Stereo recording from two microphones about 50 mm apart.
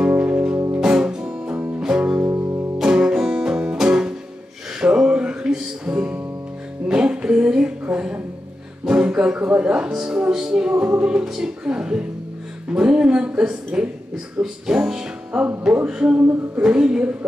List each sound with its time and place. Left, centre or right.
0.1 s music: right
0.7 s guitar: centre
1.8 s music: centre
2.2 s music: right
2.8 s music: centre
6.9 s a sound: centre
7.9 s a woman's voice: centre
8.8 s music: centre
9.4 s a woman's voice: right
10.7 s a woman's voice: right
14.8 s a woman's voice: centre
15.6 s a woman's voice: right